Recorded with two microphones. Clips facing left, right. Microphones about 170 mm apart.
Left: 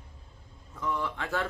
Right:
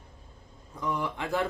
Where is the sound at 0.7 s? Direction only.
15° right (ahead or behind).